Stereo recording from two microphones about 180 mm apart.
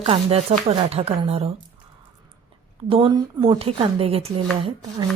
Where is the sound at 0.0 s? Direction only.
35° right (ahead or behind).